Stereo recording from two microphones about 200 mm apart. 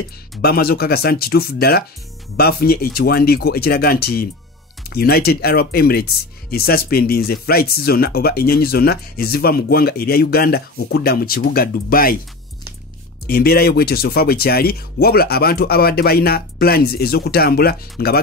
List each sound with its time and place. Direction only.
0.4 s speech: 50° left (ahead or behind)
13.3 s speech: 50° left (ahead or behind)